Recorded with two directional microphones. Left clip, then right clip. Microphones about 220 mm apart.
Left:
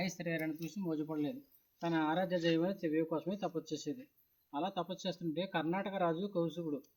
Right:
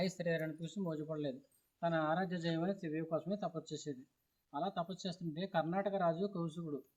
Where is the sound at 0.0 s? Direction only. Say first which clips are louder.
Right 1 dB; 10° right (ahead or behind).